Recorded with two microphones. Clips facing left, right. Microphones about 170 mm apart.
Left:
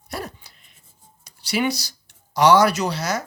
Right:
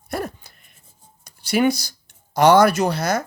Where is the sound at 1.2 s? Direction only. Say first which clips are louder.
Right 5 dB; 55° right (ahead or behind).